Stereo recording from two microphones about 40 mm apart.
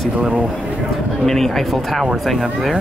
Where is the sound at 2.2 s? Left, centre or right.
Centre.